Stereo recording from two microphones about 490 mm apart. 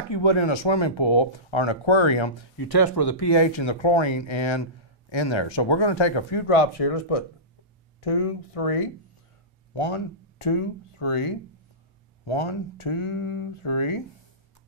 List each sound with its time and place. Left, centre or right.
0.1 s speech: left
2.5 s speech: left
9.8 s speech: left
12.3 s speech: left